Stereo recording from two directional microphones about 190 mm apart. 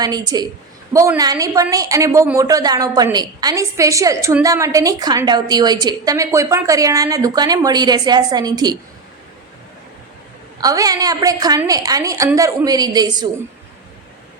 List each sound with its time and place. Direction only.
0.0 s speech: 20° right (ahead or behind)
10.6 s speech: 20° right (ahead or behind)